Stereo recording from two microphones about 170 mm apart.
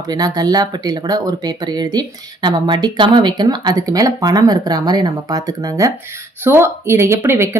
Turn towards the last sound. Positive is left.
turn(degrees=-15)  # may be behind; listen again after turning